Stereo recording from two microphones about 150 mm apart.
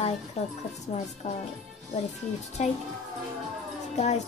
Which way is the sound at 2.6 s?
50° left (ahead or behind).